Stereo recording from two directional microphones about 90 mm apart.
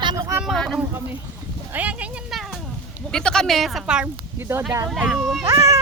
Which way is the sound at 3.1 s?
5° left (ahead or behind).